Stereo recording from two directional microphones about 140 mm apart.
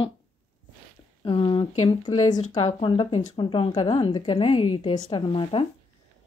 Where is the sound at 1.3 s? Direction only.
35° left (ahead or behind).